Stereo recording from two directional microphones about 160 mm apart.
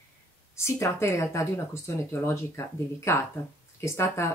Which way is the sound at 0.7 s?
15° left (ahead or behind).